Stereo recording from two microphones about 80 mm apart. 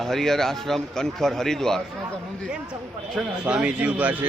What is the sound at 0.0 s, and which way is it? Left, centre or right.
A man's voice, centre.